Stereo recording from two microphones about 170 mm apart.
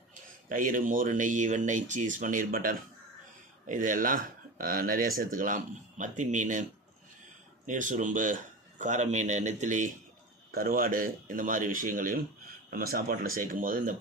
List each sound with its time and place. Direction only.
0.1 s speech: 55° right (ahead or behind)
7.7 s speech: 50° right (ahead or behind)
10.5 s speech: 60° right (ahead or behind)